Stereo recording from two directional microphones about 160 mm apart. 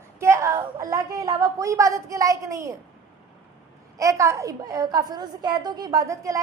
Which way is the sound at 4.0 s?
20° right (ahead or behind).